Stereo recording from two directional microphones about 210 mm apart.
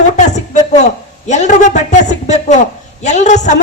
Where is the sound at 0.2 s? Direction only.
35° left (ahead or behind).